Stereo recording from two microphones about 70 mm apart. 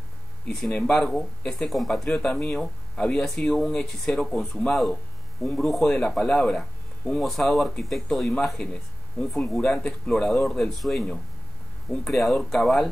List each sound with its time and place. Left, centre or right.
0.5 s speech: centre
5.5 s speech: centre